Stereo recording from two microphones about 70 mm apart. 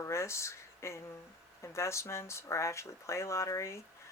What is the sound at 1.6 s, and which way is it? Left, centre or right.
Speech, left.